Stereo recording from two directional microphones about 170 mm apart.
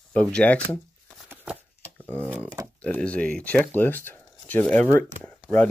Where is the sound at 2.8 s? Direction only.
5° left (ahead or behind).